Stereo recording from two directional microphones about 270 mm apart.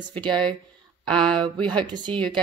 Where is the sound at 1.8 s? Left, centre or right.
Centre.